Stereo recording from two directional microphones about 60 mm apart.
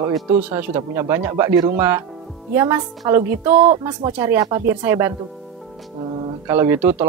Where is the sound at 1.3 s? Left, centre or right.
Right.